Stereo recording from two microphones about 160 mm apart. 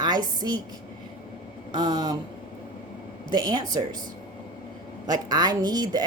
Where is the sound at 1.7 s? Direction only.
25° right (ahead or behind).